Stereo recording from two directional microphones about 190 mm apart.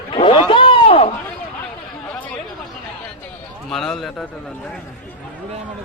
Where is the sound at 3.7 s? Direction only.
Centre (ahead or behind).